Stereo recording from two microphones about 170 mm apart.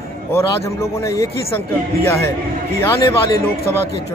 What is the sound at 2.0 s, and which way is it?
A man's voice, 15° left (ahead or behind).